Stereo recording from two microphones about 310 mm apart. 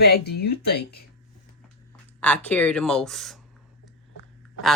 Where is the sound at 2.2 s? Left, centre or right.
Centre.